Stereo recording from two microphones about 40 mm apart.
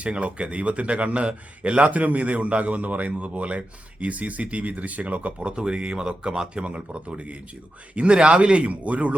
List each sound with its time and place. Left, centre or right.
0.0 s a man's voice: right